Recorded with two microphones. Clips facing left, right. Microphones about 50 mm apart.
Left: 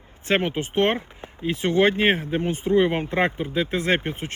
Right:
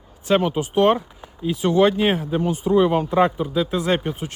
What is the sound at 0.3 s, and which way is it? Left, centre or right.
Speech, left.